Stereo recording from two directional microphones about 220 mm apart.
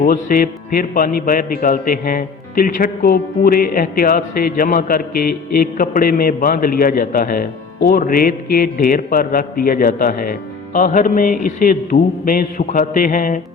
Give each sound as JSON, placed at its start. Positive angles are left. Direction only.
{"t": 0.0, "sound": "speech", "side_deg": 40}